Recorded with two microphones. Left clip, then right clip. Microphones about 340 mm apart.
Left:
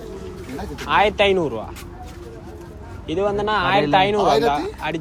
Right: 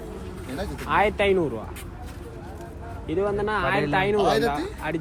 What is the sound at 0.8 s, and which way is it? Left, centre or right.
Speech, centre.